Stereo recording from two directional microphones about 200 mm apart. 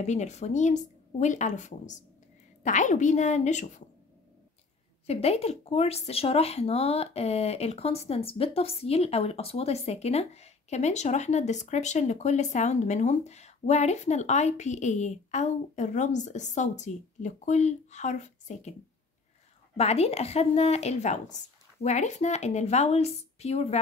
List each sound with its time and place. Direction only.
0.0 s speech: 35° left (ahead or behind)
5.0 s speech: 30° left (ahead or behind)
19.8 s speech: 30° left (ahead or behind)